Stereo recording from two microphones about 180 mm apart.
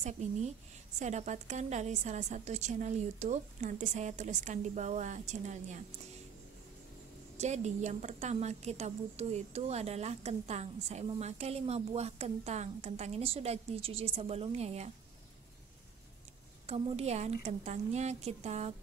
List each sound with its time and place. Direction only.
0.0 s a woman's voice: 40° right (ahead or behind)
7.3 s a woman's voice: 40° right (ahead or behind)
16.6 s a woman's voice: 35° right (ahead or behind)